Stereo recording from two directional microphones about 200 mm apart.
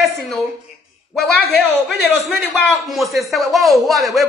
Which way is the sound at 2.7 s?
Centre (ahead or behind).